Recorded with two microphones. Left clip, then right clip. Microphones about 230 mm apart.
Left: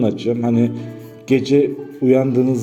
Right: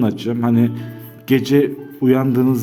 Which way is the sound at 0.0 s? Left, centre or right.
Right.